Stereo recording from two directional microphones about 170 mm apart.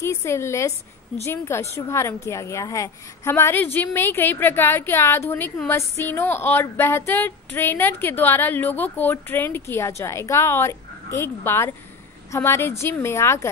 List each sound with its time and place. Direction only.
0.0 s a woman's voice: 15° left (ahead or behind)